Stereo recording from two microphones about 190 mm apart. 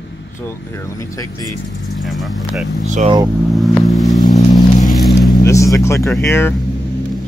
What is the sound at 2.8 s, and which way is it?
Speech, 40° right (ahead or behind).